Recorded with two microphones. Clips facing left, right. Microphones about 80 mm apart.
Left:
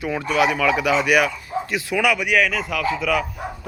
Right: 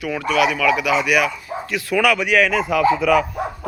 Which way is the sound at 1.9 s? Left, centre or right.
Centre.